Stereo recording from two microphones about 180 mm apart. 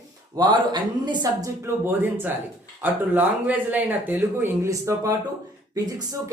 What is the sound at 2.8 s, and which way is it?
Speech, 10° right (ahead or behind).